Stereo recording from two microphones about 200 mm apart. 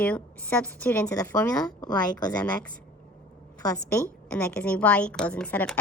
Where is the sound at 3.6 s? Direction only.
15° left (ahead or behind).